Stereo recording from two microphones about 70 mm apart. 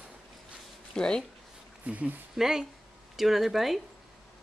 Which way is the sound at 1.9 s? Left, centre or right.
Right.